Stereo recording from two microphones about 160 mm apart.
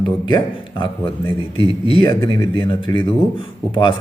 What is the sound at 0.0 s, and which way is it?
A man's voice, 30° left (ahead or behind).